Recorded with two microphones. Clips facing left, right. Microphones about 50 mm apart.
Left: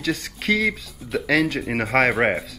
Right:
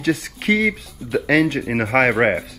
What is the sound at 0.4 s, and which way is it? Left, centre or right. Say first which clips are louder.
Speech: right 2 dB; right.